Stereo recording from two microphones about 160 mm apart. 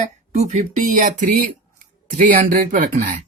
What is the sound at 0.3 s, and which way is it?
Speech, 50° right (ahead or behind).